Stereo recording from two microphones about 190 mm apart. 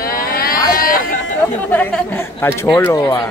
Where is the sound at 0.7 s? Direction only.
45° left (ahead or behind).